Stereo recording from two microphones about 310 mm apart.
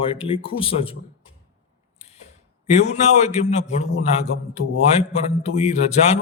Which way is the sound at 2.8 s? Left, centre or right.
Left.